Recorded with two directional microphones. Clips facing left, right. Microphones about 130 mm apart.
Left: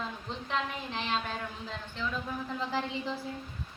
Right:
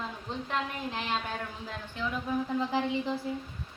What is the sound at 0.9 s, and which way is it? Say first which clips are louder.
Speech: left 1 dB; 10° right (ahead or behind).